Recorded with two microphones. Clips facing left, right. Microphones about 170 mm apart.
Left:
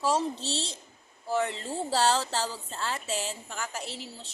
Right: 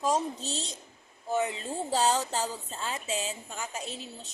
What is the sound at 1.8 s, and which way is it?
A woman's voice, 15° right (ahead or behind).